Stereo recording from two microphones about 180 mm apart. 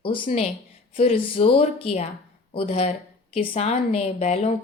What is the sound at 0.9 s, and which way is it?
Speech, 30° left (ahead or behind).